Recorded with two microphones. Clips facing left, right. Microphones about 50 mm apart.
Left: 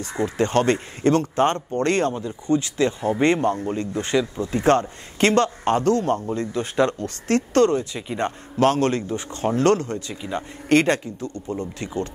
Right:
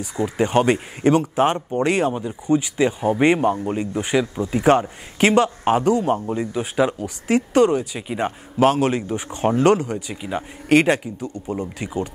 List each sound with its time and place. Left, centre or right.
0.2 s a man's voice: centre